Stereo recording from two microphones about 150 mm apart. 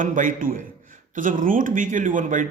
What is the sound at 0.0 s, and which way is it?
A man's voice, 60° right (ahead or behind).